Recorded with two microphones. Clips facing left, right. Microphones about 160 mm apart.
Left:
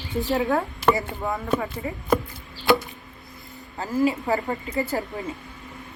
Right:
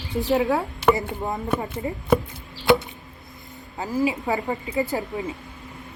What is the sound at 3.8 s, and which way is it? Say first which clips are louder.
Speech: left 1 dB; 15° right (ahead or behind).